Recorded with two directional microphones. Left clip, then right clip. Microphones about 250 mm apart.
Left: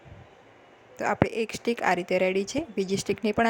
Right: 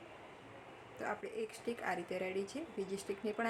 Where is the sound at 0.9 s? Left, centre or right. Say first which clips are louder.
Left 15 dB; left.